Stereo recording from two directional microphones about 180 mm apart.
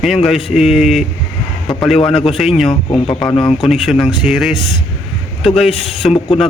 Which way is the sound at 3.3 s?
30° left (ahead or behind).